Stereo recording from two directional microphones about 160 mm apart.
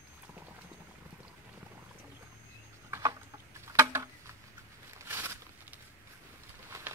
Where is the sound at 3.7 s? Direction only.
15° right (ahead or behind).